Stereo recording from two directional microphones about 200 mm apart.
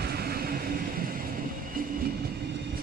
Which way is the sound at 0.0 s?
50° right (ahead or behind).